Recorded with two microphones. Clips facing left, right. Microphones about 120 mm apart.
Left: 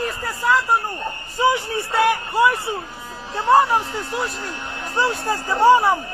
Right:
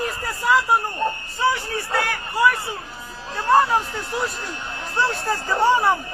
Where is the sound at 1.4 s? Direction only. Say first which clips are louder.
Left 3 dB; 20° left (ahead or behind).